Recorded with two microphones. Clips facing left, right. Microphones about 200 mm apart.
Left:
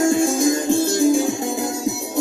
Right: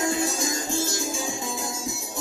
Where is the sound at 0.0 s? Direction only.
50° left (ahead or behind).